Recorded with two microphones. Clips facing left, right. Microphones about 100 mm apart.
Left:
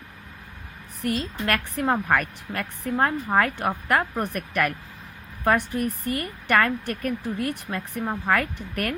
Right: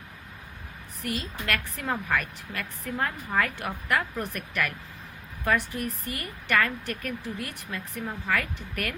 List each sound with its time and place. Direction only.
1.0 s a woman's voice: 45° left (ahead or behind)